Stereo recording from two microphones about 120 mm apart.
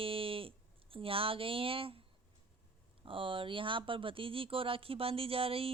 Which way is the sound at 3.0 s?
45° right (ahead or behind).